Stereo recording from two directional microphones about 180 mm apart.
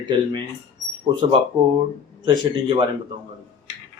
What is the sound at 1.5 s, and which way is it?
Speech, 25° right (ahead or behind).